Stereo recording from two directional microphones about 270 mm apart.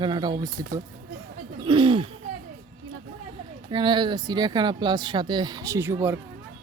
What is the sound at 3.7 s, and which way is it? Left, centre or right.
Speech, centre.